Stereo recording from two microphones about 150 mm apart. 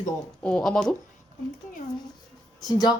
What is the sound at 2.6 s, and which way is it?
Speech, 25° left (ahead or behind).